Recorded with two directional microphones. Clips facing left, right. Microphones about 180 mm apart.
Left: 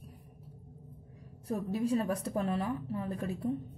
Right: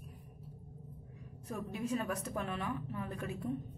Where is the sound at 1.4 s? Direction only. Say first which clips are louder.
Left 7 dB; 35° left (ahead or behind).